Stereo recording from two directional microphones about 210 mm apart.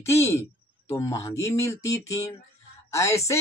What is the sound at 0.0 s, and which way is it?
Speech, 15° left (ahead or behind).